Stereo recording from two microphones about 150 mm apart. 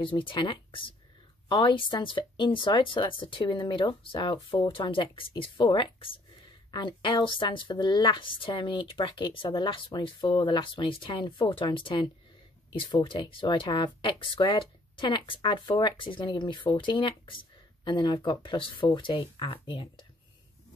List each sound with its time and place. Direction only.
0.0 s speech: 35° left (ahead or behind)